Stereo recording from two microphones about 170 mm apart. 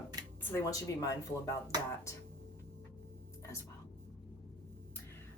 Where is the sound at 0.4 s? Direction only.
15° left (ahead or behind).